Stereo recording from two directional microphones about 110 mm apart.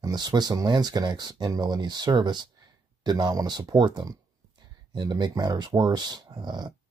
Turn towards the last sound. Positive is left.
turn(degrees=-40)  # may be behind; listen again after turning